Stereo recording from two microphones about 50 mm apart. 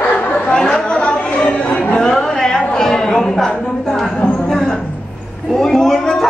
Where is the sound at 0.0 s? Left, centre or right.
Left.